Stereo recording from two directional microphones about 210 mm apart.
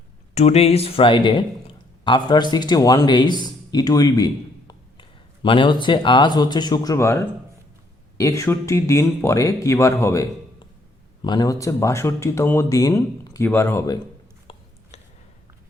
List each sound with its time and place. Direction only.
0.3 s a man's voice: 30° left (ahead or behind); by 14.0 s 15° left (ahead or behind)